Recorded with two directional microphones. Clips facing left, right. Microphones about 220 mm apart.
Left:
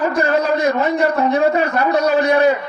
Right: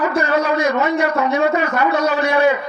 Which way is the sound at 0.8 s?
35° left (ahead or behind).